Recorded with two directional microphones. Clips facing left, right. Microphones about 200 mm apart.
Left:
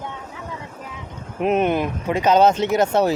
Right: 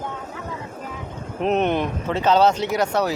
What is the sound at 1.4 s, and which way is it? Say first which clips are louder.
Speech: left 1 dB; 10° left (ahead or behind).